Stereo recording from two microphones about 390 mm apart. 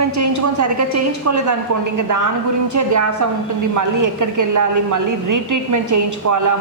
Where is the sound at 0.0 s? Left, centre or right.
Right.